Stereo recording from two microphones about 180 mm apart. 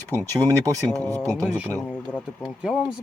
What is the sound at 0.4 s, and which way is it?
Speech, 20° right (ahead or behind).